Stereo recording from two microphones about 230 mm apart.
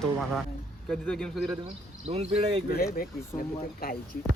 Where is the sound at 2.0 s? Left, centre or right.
Right.